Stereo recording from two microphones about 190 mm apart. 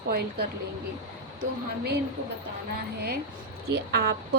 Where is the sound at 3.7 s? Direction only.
60° right (ahead or behind).